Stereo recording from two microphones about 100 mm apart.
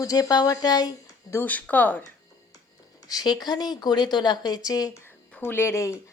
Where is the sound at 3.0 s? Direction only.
40° left (ahead or behind).